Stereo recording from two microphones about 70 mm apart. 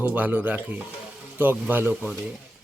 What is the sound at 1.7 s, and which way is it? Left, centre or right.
Speech, right.